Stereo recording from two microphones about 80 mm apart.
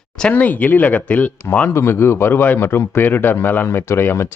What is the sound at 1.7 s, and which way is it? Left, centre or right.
A man's voice, left.